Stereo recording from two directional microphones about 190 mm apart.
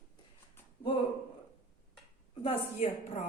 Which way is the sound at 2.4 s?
35° left (ahead or behind).